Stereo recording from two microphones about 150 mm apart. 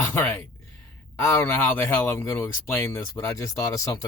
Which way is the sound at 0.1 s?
10° left (ahead or behind).